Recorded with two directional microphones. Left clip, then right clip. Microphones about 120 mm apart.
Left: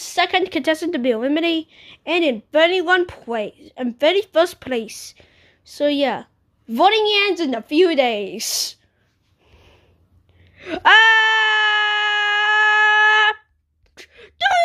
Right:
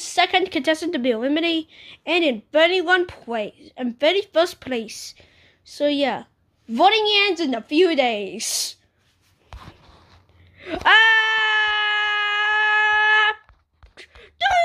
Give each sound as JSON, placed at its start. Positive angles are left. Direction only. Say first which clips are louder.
{"t": 0.0, "sound": "speech", "louder": "even", "side_deg": 25}
{"t": 10.5, "sound": "wail", "louder": "left 3 dB", "side_deg": 30}